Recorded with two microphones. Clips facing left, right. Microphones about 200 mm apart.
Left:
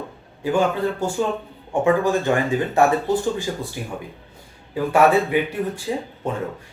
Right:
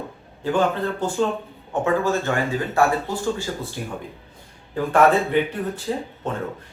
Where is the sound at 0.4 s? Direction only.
10° left (ahead or behind).